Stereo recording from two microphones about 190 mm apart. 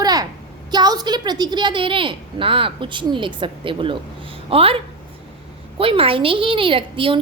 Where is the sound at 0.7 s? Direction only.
20° right (ahead or behind).